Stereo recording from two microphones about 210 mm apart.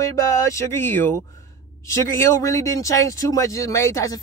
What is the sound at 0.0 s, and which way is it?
Speech, 15° left (ahead or behind).